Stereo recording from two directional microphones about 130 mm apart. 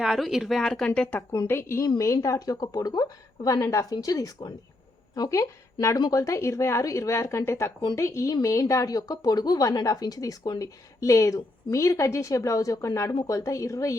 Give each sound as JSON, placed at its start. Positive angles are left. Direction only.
{"t": 0.0, "sound": "speech", "side_deg": -5}
{"t": 1.3, "sound": "a woman's voice", "side_deg": 20}